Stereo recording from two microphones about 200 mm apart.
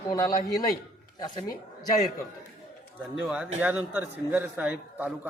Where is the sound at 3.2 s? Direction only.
5° right (ahead or behind).